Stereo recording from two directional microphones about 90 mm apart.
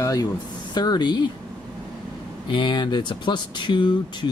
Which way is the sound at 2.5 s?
60° left (ahead or behind).